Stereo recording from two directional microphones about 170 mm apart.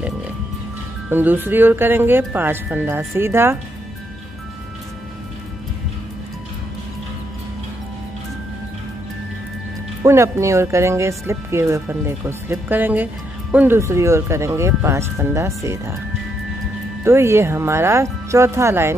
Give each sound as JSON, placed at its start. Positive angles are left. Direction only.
{"t": 1.1, "sound": "speech", "side_deg": -10}
{"t": 10.0, "sound": "speech", "side_deg": -15}
{"t": 17.0, "sound": "speech", "side_deg": -15}